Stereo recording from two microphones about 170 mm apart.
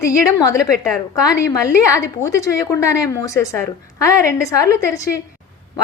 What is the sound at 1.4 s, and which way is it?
A woman's voice, 20° left (ahead or behind).